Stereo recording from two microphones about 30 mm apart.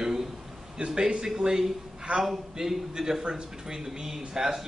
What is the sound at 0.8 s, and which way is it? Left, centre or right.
A man's voice, right.